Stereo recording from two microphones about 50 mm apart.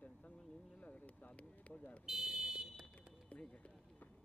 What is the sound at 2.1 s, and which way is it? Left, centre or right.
Fire alarm, centre.